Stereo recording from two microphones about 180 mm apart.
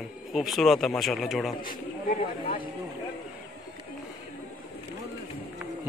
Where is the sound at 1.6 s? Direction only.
50° left (ahead or behind).